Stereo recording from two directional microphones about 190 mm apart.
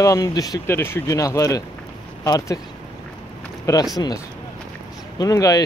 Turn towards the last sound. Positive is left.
turn(degrees=20)  # may be behind; listen again after turning